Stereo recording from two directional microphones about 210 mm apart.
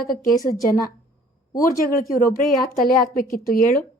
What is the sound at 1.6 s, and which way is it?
A woman's voice, 40° left (ahead or behind).